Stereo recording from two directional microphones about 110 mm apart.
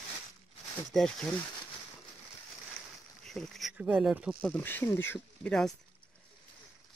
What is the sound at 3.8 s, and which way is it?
Speech, 15° right (ahead or behind).